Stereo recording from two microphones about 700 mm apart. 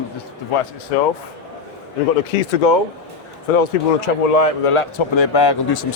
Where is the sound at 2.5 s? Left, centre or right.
Left.